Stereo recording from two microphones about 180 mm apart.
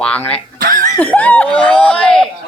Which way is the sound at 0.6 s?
50° right (ahead or behind).